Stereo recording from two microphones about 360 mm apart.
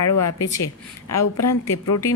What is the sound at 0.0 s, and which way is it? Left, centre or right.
Speech, left.